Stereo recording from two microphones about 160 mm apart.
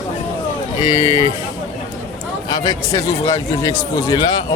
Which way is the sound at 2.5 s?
25° left (ahead or behind).